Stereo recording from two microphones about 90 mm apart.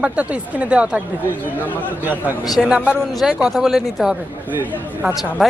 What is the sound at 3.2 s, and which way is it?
Speech, 5° right (ahead or behind).